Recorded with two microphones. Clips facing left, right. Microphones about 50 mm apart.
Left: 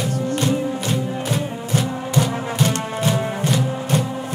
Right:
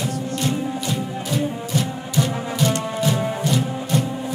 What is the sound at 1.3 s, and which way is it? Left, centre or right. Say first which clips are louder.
Music: right 2 dB; left.